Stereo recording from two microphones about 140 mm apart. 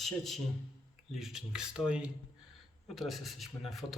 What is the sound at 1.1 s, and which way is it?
Speech, centre (ahead or behind).